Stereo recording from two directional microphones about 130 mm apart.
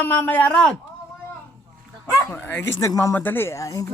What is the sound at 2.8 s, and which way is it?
Speech, 25° left (ahead or behind).